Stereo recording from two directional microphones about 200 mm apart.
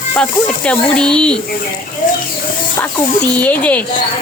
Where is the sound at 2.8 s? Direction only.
5° left (ahead or behind).